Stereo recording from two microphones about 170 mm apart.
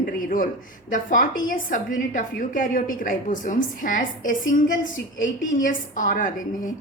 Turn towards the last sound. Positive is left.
turn(degrees=50)  # may be behind; listen again after turning